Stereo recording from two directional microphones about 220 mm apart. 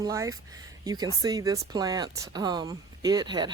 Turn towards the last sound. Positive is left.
turn(degrees=-20)  # may be behind; listen again after turning